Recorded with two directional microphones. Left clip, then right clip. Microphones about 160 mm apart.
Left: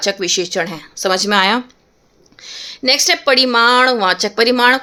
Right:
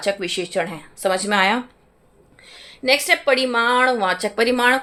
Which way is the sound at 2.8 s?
45° left (ahead or behind).